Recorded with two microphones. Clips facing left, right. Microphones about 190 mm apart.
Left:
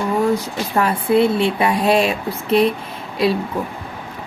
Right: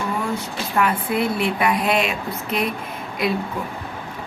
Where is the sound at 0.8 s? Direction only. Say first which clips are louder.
Left 5 dB; 30° left (ahead or behind).